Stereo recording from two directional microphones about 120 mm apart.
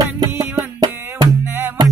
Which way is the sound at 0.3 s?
20° right (ahead or behind).